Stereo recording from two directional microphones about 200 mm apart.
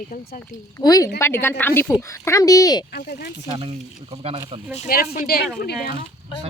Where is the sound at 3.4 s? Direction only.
25° right (ahead or behind).